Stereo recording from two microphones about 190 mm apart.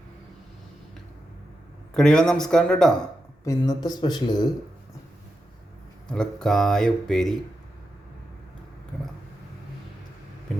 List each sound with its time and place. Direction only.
1.9 s speech: 5° left (ahead or behind)
3.4 s speech: 20° left (ahead or behind)
6.1 s speech: 5° left (ahead or behind)